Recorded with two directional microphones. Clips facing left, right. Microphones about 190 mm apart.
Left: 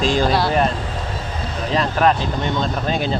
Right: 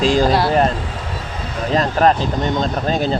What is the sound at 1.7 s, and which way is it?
Speech, 40° right (ahead or behind).